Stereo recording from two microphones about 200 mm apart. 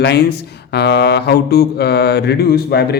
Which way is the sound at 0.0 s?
55° left (ahead or behind).